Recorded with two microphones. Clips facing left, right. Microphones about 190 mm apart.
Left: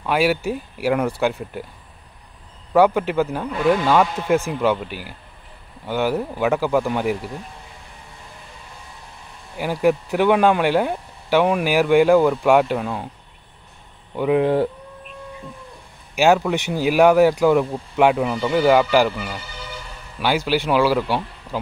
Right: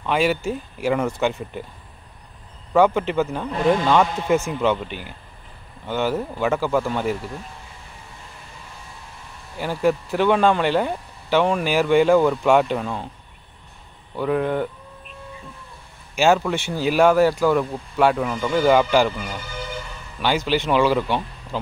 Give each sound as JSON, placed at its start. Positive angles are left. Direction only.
{"t": 0.0, "sound": "speech", "side_deg": 10}
{"t": 2.7, "sound": "speech", "side_deg": 5}
{"t": 9.6, "sound": "speech", "side_deg": 10}
{"t": 14.1, "sound": "speech", "side_deg": 15}
{"t": 14.4, "sound": "speech", "side_deg": 30}
{"t": 16.2, "sound": "speech", "side_deg": 15}
{"t": 20.2, "sound": "speech", "side_deg": 10}